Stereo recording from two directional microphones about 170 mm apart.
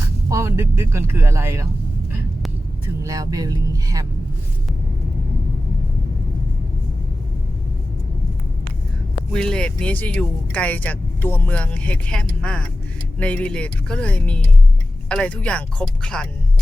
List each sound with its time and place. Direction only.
0.3 s speech: 15° right (ahead or behind)
3.0 s speech: 20° right (ahead or behind)
9.3 s speech: 5° left (ahead or behind)